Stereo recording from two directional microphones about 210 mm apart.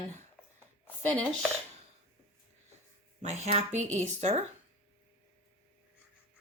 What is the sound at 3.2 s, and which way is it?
Speech, 30° right (ahead or behind).